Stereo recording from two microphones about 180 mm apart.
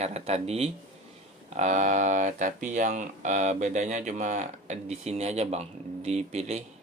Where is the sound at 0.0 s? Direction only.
35° right (ahead or behind).